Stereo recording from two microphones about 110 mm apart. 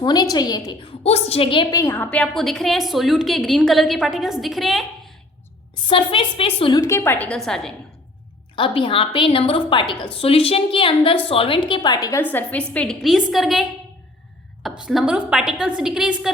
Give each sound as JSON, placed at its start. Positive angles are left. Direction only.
{"t": 0.0, "sound": "a woman's voice", "side_deg": 35}
{"t": 1.0, "sound": "a woman's voice", "side_deg": 65}
{"t": 1.7, "sound": "a woman's voice", "side_deg": 25}
{"t": 2.0, "sound": "a woman's voice", "side_deg": 10}
{"t": 5.9, "sound": "a woman's voice", "side_deg": 55}
{"t": 6.7, "sound": "a woman's voice", "side_deg": 25}
{"t": 8.5, "sound": "a woman's voice", "side_deg": 50}
{"t": 12.2, "sound": "a woman's voice", "side_deg": 15}
{"t": 13.0, "sound": "a woman's voice", "side_deg": 0}